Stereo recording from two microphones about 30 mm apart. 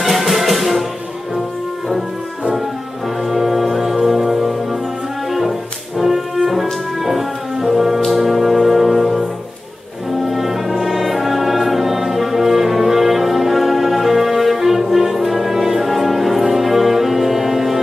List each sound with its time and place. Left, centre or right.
0.0 s music: centre
3.3 s music: centre
5.9 s music: centre
10.2 s music: centre